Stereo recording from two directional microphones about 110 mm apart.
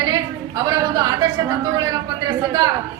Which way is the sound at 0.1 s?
35° right (ahead or behind).